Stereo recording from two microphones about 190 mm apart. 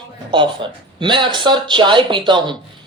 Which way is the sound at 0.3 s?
25° right (ahead or behind).